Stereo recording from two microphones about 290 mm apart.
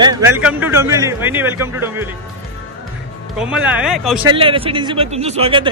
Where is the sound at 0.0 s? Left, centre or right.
Centre.